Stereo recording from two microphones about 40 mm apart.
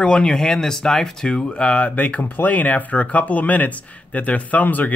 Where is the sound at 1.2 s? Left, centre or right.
Centre; by 4.9 s left.